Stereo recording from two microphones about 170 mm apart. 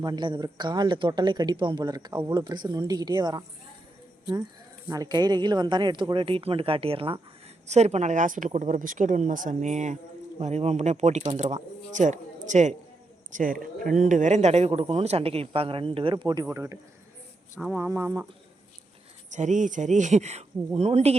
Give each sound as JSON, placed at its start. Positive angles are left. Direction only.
{"t": 0.0, "sound": "speech", "side_deg": -25}
{"t": 4.9, "sound": "speech", "side_deg": -20}
{"t": 19.3, "sound": "speech", "side_deg": -45}